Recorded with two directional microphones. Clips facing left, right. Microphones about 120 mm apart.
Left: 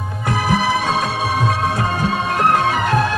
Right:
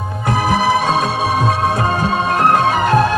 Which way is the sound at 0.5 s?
35° right (ahead or behind).